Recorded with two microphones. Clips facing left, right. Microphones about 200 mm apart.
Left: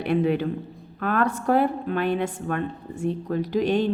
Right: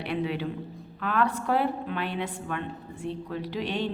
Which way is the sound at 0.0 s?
50° left (ahead or behind).